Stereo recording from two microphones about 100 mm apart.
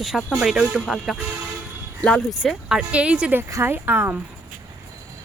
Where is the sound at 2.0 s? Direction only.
10° left (ahead or behind).